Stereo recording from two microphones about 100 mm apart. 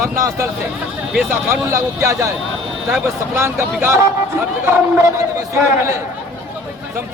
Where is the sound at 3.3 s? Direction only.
25° right (ahead or behind).